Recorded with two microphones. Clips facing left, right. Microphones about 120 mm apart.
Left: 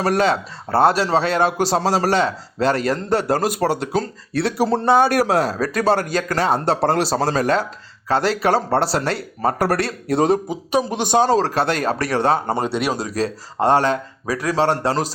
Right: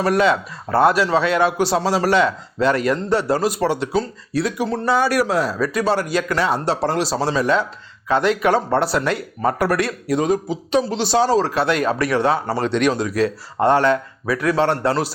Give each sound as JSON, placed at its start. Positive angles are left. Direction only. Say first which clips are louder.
{"t": 0.0, "sound": "speech", "louder": "right 1 dB", "side_deg": 35}
{"t": 4.5, "sound": "speech", "louder": "left 7 dB", "side_deg": 35}
{"t": 4.9, "sound": "speech", "louder": "even", "side_deg": 50}
{"t": 10.7, "sound": "a man's voice", "louder": "even", "side_deg": 15}
{"t": 11.2, "sound": "speech", "louder": "even", "side_deg": 50}
{"t": 12.5, "sound": "a man's voice", "louder": "right 3 dB", "side_deg": 10}
{"t": 13.0, "sound": "speech", "louder": "right 3 dB", "side_deg": 35}